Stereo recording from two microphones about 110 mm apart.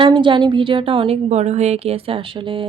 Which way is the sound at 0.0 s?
50° right (ahead or behind).